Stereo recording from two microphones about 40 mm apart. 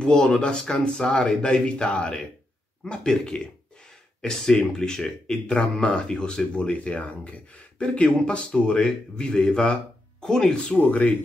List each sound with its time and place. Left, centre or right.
0.0 s speech: left
10.7 s speech: left